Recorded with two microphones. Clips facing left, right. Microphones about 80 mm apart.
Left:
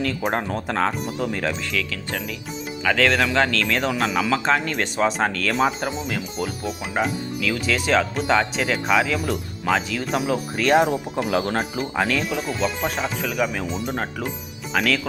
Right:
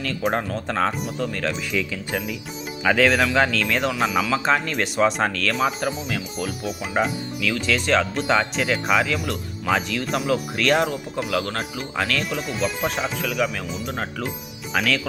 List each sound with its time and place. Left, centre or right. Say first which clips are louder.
0.0 s speech: even; centre
1.7 s speech: right 2 dB; centre; by 11.5 s left
11.9 s speech: left 1 dB; centre
12.4 s speech: left 1 dB; centre